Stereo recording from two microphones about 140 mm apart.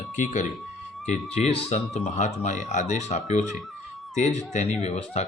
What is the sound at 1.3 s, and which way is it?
Speech, 50° left (ahead or behind).